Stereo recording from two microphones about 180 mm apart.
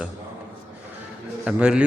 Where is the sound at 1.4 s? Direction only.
5° right (ahead or behind).